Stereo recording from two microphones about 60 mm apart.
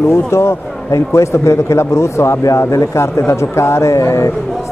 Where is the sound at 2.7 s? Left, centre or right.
Left.